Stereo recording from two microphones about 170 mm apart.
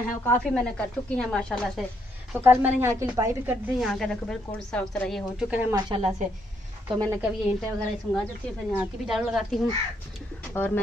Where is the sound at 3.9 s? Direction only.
5° left (ahead or behind).